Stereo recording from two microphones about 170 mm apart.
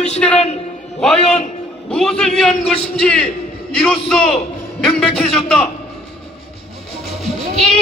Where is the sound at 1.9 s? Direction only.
5° left (ahead or behind).